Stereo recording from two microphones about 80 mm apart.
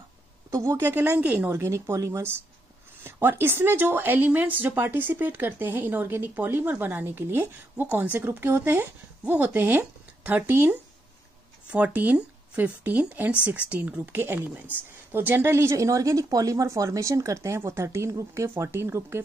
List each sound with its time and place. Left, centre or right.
0.5 s speech: right; by 1.5 s centre
1.5 s speech: right
3.0 s speech: right